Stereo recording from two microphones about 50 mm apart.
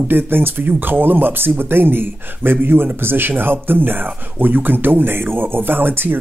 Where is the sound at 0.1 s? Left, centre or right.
Right.